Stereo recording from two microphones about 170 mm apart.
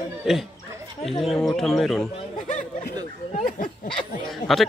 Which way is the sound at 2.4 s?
50° left (ahead or behind).